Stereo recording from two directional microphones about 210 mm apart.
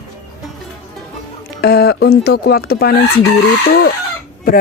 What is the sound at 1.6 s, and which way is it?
Speech, 50° left (ahead or behind).